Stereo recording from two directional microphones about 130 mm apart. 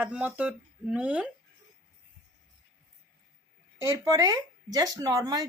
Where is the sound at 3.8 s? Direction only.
25° right (ahead or behind).